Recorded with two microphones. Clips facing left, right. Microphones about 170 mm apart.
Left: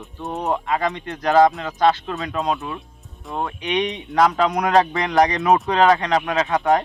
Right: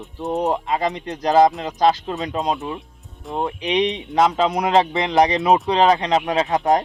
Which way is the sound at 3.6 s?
35° right (ahead or behind).